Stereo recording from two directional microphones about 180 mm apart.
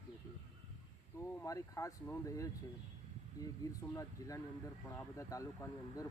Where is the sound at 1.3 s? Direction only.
15° left (ahead or behind).